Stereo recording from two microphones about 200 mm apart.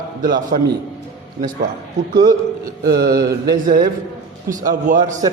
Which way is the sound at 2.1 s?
20° right (ahead or behind).